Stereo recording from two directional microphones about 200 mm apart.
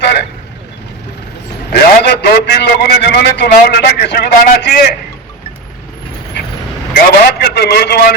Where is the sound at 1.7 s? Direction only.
55° left (ahead or behind).